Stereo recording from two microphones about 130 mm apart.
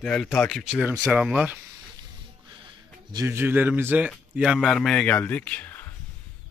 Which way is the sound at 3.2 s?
20° right (ahead or behind).